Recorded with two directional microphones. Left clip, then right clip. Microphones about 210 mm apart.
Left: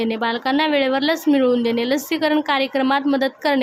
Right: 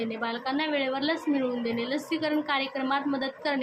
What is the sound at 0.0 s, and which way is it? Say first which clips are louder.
A woman's voice: left 10 dB; 50° left (ahead or behind).